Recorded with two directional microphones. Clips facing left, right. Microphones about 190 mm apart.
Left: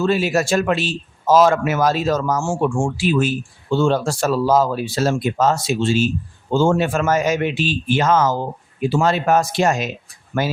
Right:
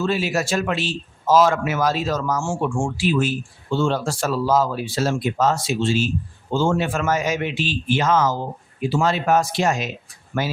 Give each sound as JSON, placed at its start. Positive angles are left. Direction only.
{"t": 0.0, "sound": "speech", "side_deg": 45}